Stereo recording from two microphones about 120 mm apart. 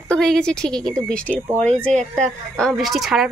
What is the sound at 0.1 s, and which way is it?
A woman's voice, 5° left (ahead or behind).